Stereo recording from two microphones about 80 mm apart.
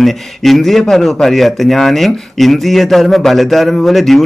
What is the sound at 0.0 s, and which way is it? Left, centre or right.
A man's voice, centre.